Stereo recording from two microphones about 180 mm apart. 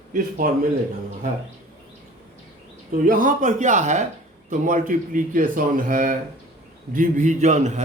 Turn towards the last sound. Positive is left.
turn(degrees=-40)  # may be behind; listen again after turning